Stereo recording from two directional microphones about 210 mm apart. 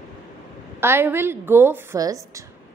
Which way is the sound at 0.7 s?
10° right (ahead or behind).